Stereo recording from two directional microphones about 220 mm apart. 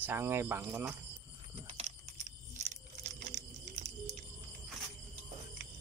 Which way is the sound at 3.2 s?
30° right (ahead or behind).